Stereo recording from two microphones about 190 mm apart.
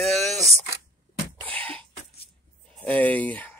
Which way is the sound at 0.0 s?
Centre (ahead or behind).